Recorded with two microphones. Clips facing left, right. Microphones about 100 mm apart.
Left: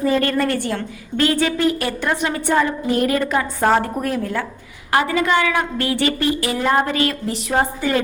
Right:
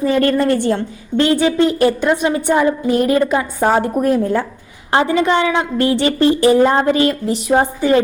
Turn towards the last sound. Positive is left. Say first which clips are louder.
# right 5 dB
turn(degrees=-25)  # may be behind; listen again after turning